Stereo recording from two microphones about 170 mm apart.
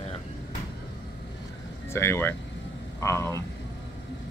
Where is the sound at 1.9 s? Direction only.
15° left (ahead or behind).